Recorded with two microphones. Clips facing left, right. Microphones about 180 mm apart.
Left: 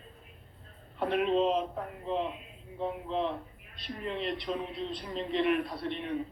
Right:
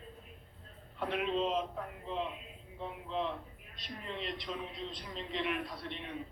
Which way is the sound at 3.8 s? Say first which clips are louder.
Left 7 dB; 55° left (ahead or behind).